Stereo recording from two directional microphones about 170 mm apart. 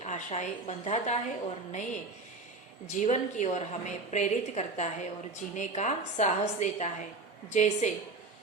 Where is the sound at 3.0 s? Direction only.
45° left (ahead or behind).